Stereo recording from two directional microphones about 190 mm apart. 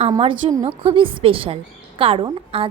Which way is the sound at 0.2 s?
25° right (ahead or behind).